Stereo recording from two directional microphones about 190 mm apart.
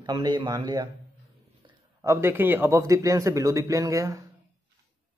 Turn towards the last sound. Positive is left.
turn(degrees=-15)  # may be behind; listen again after turning